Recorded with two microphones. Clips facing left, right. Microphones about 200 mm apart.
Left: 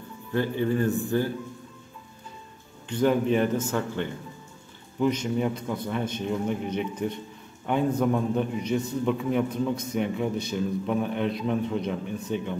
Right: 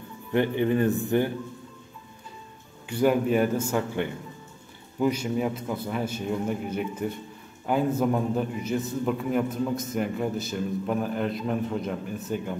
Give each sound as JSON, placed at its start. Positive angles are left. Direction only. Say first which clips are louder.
{"t": 0.3, "sound": "speech", "louder": "right 2 dB", "side_deg": -20}
{"t": 2.9, "sound": "a man's voice", "louder": "even", "side_deg": -10}